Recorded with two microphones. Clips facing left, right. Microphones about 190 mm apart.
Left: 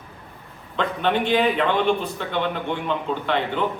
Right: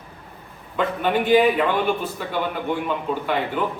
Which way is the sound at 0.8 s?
5° right (ahead or behind).